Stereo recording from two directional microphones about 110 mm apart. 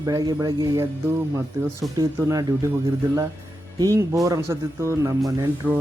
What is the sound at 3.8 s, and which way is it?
Speech, 30° right (ahead or behind).